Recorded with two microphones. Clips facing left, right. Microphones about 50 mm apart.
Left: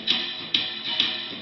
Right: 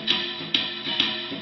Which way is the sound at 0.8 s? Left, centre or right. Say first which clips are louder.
Right 1 dB; centre.